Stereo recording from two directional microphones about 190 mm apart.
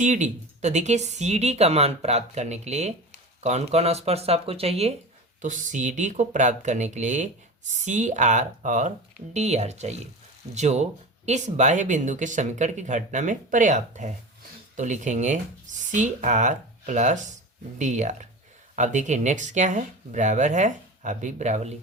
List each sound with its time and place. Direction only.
0.0 s speech: 40° right (ahead or behind)